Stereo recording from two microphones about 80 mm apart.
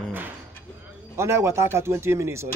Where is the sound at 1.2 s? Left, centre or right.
Right.